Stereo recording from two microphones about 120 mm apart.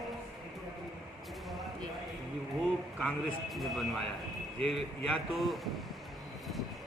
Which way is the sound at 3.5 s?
Centre (ahead or behind).